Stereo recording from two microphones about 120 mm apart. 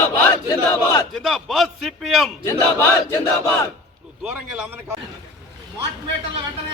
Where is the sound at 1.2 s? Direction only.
Centre (ahead or behind).